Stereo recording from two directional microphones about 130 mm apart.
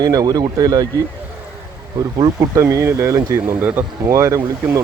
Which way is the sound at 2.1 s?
30° right (ahead or behind).